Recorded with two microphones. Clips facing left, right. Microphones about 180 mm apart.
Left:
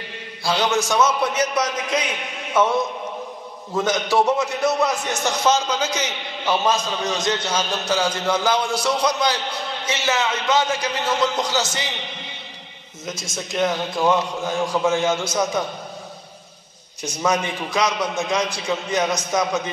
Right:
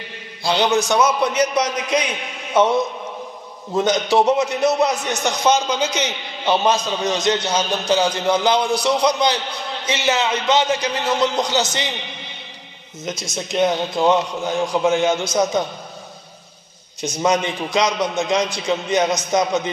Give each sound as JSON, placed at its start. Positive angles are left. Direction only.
{"t": 0.4, "sound": "a man's voice", "side_deg": -20}
{"t": 3.7, "sound": "a man's voice", "side_deg": -20}
{"t": 13.6, "sound": "a man's voice", "side_deg": -20}
{"t": 17.0, "sound": "a man's voice", "side_deg": -20}